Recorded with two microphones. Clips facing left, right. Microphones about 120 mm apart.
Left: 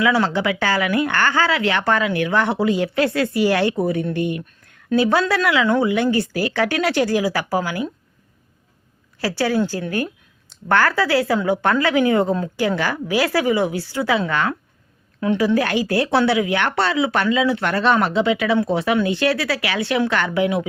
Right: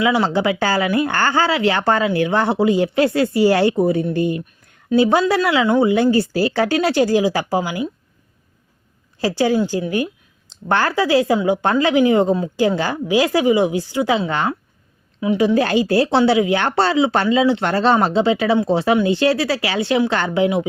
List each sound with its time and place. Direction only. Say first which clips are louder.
0.0 s speech: right 1 dB; 25° right (ahead or behind)
9.2 s speech: right 3 dB; 20° right (ahead or behind)